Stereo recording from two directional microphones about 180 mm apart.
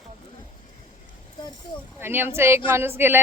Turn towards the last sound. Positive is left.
turn(degrees=-15)  # may be behind; listen again after turning